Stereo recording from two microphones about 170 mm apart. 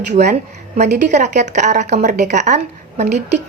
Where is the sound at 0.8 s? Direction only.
45° right (ahead or behind).